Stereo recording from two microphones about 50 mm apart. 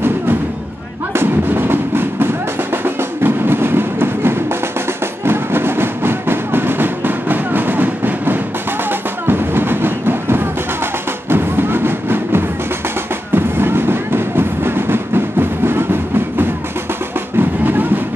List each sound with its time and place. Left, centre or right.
1.1 s music: right
9.3 s train: right
11.2 s music: right
17.4 s music: right